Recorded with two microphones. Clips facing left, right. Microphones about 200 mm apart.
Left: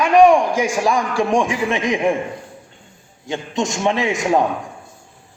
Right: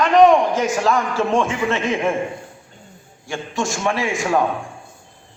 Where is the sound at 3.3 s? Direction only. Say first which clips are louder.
Left 2 dB; 20° left (ahead or behind).